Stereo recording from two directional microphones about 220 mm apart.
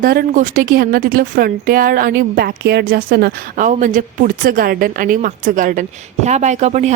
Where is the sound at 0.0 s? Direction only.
40° right (ahead or behind).